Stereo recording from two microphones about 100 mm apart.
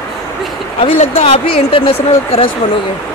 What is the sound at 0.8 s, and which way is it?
Speech, 85° left.